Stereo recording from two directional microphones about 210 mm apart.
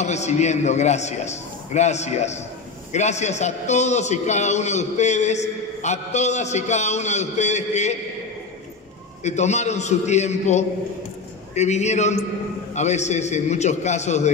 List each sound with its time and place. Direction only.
0.0 s a man's voice: 35° left (ahead or behind)
9.2 s a man's voice: 35° left (ahead or behind)